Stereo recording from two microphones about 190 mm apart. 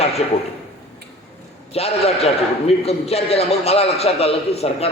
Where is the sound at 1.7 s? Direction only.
35° left (ahead or behind).